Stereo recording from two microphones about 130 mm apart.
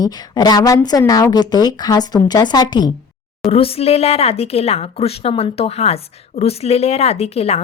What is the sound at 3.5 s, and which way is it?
A woman's voice, 50° left (ahead or behind).